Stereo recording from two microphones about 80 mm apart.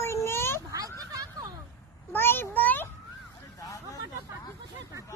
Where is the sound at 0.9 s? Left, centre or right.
Right.